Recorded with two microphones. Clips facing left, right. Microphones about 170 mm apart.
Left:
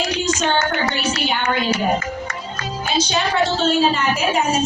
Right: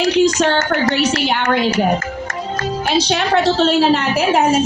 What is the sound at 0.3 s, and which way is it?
A woman's voice, 70° right (ahead or behind).